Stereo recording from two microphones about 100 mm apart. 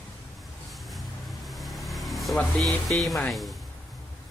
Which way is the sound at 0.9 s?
Centre (ahead or behind).